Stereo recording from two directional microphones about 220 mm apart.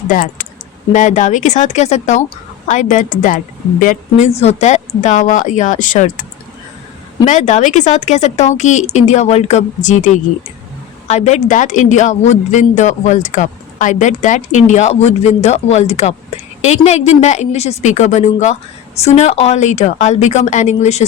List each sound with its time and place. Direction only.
0.1 s a woman's voice: 40° left (ahead or behind)
7.3 s a woman's voice: 35° left (ahead or behind)